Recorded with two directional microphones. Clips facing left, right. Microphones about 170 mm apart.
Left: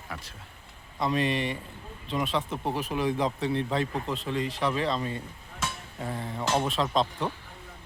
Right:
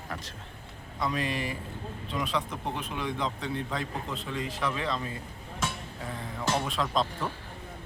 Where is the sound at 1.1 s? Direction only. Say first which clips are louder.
Left 6 dB; centre (ahead or behind).